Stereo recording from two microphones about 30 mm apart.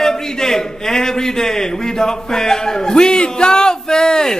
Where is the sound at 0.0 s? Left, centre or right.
Centre.